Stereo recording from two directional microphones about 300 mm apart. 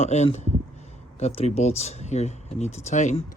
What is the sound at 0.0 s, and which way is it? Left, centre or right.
Speech, left.